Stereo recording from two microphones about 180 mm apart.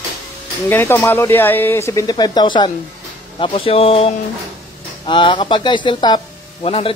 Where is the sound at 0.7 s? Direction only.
15° left (ahead or behind).